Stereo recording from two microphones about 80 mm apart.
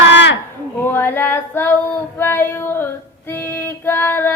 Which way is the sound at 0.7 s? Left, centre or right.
Left.